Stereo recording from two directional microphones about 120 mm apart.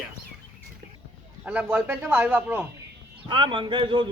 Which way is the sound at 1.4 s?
15° right (ahead or behind).